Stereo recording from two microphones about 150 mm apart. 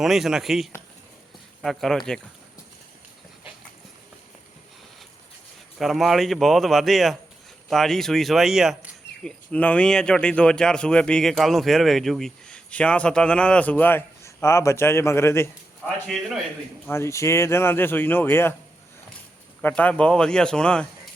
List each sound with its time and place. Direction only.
0.0 s speech: centre (ahead or behind)
5.8 s speech: centre (ahead or behind)
9.5 s a man's voice: 10° left (ahead or behind)
16.0 s speech: centre (ahead or behind)
16.8 s a man's voice: 15° left (ahead or behind)
19.6 s speech: 10° left (ahead or behind)